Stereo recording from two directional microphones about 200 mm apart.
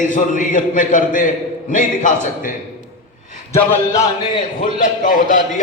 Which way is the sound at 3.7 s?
15° left (ahead or behind).